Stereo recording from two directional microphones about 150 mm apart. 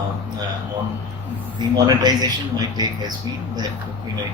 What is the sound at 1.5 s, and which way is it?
Speech, 30° right (ahead or behind).